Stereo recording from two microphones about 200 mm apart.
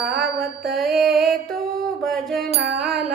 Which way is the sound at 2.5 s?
55° right (ahead or behind).